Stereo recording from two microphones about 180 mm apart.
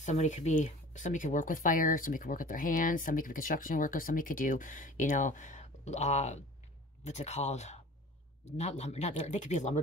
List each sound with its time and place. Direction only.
0.0 s speech: 40° left (ahead or behind)